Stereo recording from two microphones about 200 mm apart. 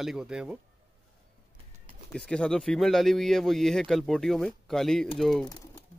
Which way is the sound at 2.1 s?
5° left (ahead or behind).